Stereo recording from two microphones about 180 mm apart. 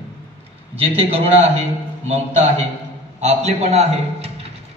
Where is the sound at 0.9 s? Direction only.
35° right (ahead or behind).